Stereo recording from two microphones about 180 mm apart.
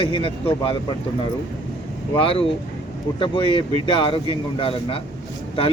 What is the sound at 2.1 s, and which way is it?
Speech, 30° left (ahead or behind).